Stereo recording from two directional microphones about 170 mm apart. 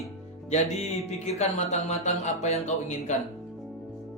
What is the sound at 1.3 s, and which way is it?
Speech, 40° left (ahead or behind).